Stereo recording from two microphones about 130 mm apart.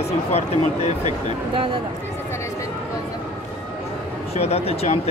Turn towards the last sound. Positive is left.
turn(degrees=50)  # may be behind; listen again after turning